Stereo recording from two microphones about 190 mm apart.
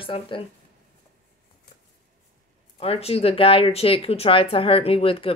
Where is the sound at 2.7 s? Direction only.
30° left (ahead or behind).